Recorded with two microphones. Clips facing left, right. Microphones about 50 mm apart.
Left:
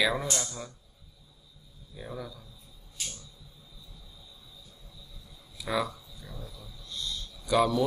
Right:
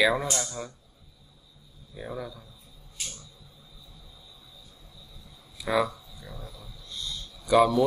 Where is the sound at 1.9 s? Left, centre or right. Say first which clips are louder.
Right 4 dB; centre.